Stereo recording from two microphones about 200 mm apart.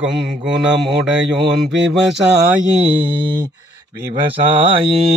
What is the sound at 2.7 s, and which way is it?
Speech, 30° right (ahead or behind).